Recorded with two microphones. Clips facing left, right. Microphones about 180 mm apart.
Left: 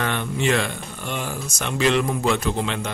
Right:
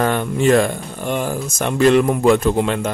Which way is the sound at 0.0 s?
45° right (ahead or behind).